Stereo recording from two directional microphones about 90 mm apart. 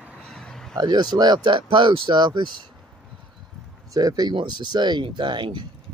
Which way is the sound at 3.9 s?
45° right (ahead or behind).